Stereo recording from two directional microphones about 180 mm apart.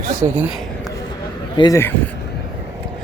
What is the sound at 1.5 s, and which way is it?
Speech, 25° left (ahead or behind).